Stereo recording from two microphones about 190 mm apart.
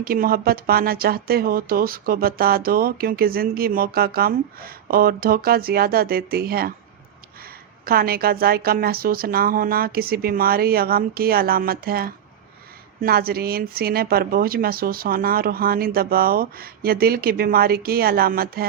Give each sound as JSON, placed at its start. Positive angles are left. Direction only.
{"t": 0.0, "sound": "speech", "side_deg": -50}
{"t": 7.9, "sound": "speech", "side_deg": -50}